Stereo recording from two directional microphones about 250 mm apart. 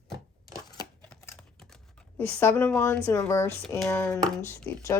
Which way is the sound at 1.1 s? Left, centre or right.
Centre.